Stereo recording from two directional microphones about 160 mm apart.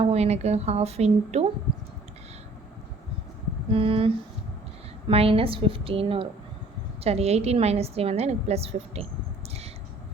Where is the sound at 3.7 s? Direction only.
35° right (ahead or behind).